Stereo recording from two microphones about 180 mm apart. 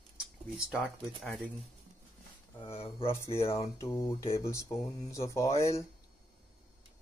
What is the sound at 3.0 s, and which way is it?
Speech, 15° left (ahead or behind).